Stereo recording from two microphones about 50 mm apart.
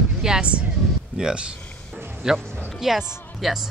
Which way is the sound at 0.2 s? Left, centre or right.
Centre.